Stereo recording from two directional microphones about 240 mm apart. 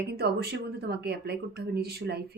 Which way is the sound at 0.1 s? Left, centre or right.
Right.